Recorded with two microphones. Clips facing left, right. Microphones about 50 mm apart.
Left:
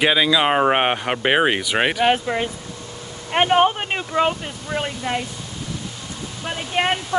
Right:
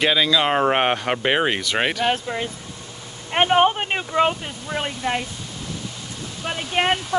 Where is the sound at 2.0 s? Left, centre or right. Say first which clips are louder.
Left 4 dB; left.